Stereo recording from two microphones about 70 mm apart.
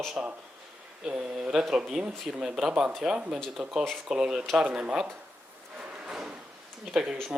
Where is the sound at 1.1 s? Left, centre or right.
Centre.